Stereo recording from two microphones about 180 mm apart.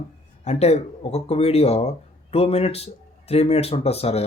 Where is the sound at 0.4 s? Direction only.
35° left (ahead or behind).